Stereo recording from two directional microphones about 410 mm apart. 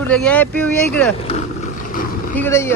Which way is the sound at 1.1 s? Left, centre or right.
Centre.